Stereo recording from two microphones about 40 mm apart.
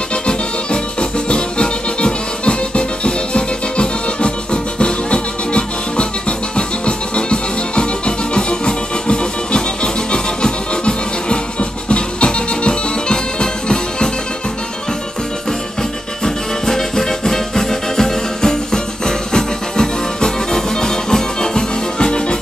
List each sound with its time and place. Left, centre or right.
0.1 s music: left
16.6 s music: centre